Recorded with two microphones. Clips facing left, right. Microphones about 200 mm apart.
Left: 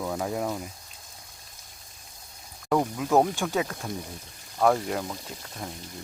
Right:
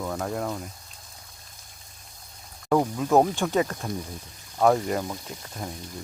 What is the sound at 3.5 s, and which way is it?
Speech, centre (ahead or behind).